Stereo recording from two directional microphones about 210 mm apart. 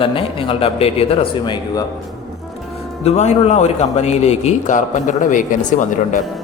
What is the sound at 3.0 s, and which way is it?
A man's voice, 30° left (ahead or behind).